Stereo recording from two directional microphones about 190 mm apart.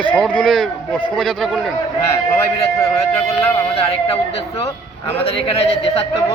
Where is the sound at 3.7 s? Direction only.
30° left (ahead or behind).